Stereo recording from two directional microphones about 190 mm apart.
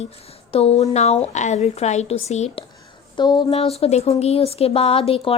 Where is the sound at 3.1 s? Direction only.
25° left (ahead or behind).